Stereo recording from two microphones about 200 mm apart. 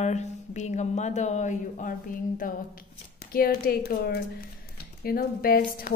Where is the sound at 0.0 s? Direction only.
35° left (ahead or behind).